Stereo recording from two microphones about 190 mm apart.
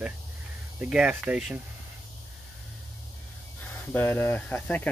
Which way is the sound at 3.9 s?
10° left (ahead or behind).